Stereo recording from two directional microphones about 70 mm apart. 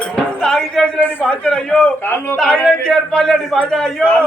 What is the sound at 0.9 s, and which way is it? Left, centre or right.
Speech, left.